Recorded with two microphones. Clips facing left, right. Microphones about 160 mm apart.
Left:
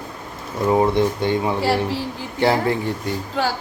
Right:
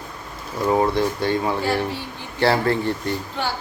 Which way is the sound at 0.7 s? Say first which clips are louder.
Left 2 dB; 20° left (ahead or behind).